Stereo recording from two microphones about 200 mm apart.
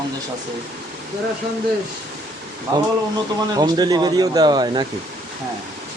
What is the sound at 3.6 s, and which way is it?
Speech, 20° right (ahead or behind).